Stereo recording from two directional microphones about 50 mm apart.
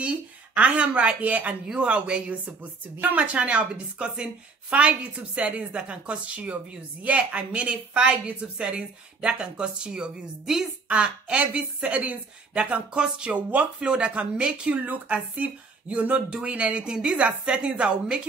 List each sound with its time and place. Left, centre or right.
0.0 s a woman's voice: right
2.4 s a woman's voice: right; by 11.0 s centre
11.0 s a woman's voice: right
14.7 s speech: right
16.3 s a woman's voice: centre